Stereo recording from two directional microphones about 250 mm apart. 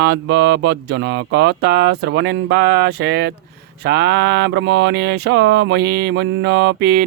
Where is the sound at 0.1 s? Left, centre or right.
Right.